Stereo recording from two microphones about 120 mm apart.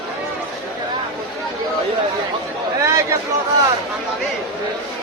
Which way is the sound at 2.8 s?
25° right (ahead or behind).